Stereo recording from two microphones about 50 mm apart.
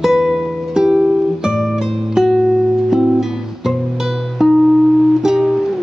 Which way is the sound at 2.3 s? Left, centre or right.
Centre.